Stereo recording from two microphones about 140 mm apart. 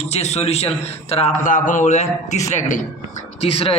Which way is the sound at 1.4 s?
65° left (ahead or behind).